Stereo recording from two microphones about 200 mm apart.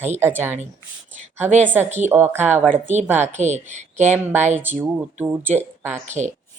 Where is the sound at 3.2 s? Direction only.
35° right (ahead or behind).